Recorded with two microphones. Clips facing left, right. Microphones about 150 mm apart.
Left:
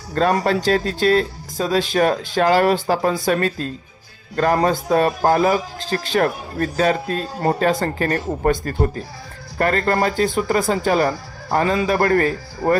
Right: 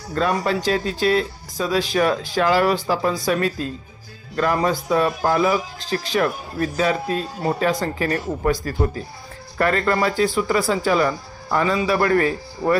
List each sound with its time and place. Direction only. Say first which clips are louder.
0.1 s a man's voice: left 3 dB; 50° left (ahead or behind)
9.6 s a man's voice: left 1 dB; 40° left (ahead or behind)